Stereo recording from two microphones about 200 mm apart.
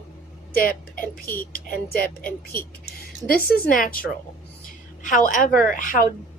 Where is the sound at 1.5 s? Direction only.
45° left (ahead or behind).